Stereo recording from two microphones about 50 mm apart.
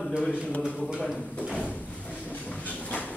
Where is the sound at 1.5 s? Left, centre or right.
Left.